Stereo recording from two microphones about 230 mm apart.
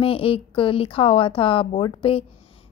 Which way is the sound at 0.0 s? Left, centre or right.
Left.